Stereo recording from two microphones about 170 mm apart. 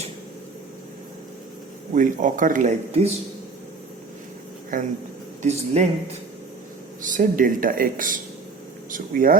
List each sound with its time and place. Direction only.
2.0 s speech: 50° right (ahead or behind)
5.4 s speech: 40° right (ahead or behind)
7.0 s speech: 50° right (ahead or behind)